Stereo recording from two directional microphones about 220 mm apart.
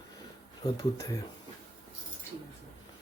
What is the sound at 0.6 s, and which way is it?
Speech, 15° left (ahead or behind).